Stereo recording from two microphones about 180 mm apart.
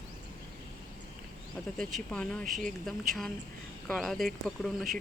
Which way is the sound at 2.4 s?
50° right (ahead or behind).